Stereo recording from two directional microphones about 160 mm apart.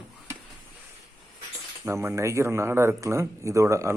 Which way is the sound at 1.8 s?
15° right (ahead or behind).